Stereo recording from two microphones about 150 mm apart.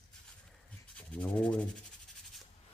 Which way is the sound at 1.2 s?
10° left (ahead or behind).